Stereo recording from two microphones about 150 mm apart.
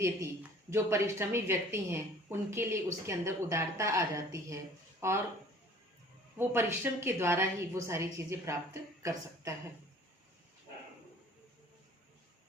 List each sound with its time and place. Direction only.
0.7 s a woman's voice: 20° right (ahead or behind)
6.4 s a woman's voice: 15° right (ahead or behind)